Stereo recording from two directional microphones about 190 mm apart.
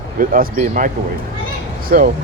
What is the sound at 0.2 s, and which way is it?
Speech, 45° right (ahead or behind).